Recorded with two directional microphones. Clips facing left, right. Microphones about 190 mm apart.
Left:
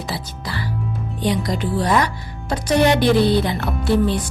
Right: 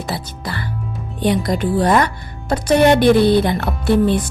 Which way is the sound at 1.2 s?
55° right (ahead or behind).